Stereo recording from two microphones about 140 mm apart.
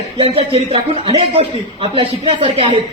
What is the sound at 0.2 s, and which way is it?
A man's voice, 45° right (ahead or behind).